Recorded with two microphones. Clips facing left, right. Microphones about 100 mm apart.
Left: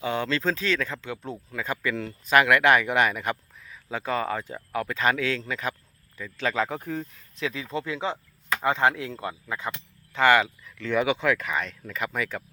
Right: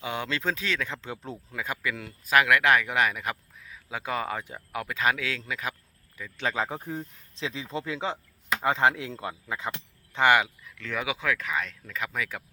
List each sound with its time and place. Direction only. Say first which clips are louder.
0.0 s speech: left 4 dB; 15° right (ahead or behind)
1.0 s speech: left 3 dB; 35° right (ahead or behind)
1.5 s speech: left 3 dB; 10° right (ahead or behind)
6.3 s speech: left 3 dB; 20° right (ahead or behind); by 12.4 s centre (ahead or behind)